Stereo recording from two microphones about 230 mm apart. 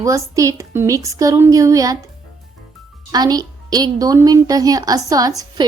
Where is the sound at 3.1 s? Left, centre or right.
Centre.